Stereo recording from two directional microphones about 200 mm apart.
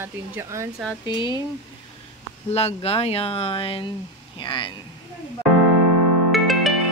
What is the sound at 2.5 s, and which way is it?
Speech, 30° left (ahead or behind).